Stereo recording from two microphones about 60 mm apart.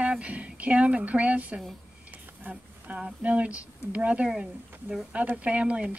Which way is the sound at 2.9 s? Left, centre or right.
Right.